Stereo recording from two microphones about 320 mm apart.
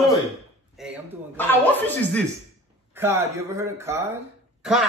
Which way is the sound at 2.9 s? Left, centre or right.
Centre.